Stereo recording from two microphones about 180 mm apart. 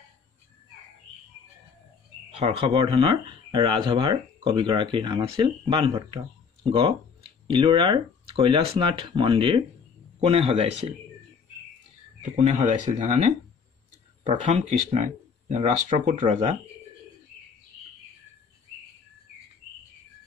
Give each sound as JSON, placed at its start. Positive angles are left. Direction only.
{"t": 2.3, "sound": "speech", "side_deg": -35}
{"t": 12.4, "sound": "speech", "side_deg": -40}
{"t": 14.4, "sound": "speech", "side_deg": -35}